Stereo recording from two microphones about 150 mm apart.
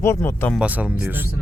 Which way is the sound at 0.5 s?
10° right (ahead or behind).